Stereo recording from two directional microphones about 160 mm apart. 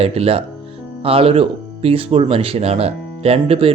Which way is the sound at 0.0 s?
40° right (ahead or behind).